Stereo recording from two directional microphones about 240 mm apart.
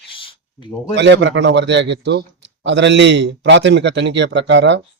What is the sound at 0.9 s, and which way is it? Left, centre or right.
A man's voice, right.